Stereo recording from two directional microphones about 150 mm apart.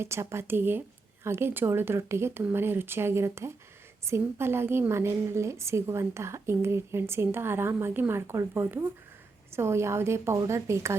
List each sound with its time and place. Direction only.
0.0 s a woman's voice: 20° right (ahead or behind)